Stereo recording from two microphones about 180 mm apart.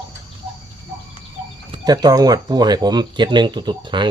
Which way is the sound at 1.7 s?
20° right (ahead or behind).